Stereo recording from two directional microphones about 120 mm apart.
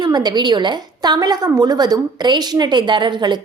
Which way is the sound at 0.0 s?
35° right (ahead or behind).